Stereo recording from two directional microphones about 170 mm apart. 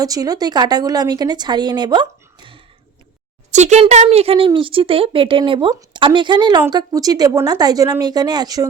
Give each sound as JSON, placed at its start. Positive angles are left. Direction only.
{"t": 0.0, "sound": "a woman's voice", "side_deg": -20}
{"t": 3.5, "sound": "a woman's voice", "side_deg": -40}